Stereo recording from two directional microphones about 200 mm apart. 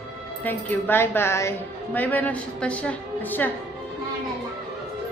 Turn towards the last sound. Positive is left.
turn(degrees=10)  # may be behind; listen again after turning